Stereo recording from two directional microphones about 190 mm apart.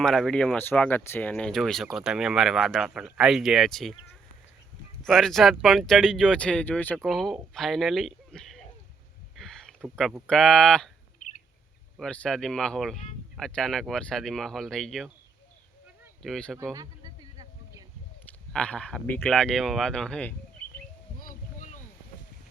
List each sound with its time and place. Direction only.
0.0 s speech: centre (ahead or behind)
5.0 s speech: centre (ahead or behind)
11.9 s speech: 5° left (ahead or behind)
16.2 s speech: centre (ahead or behind)
16.7 s a sound: 20° right (ahead or behind)
18.5 s speech: 5° left (ahead or behind)
21.2 s boat: 45° left (ahead or behind)